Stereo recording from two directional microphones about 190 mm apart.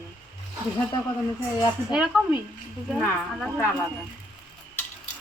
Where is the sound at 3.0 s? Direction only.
10° left (ahead or behind).